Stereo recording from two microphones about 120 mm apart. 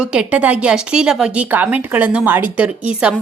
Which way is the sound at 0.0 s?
10° right (ahead or behind).